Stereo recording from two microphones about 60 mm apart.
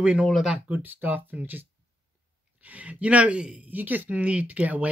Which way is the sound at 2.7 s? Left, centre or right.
Right.